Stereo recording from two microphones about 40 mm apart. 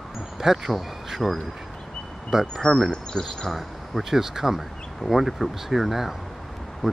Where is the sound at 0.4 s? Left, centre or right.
Centre.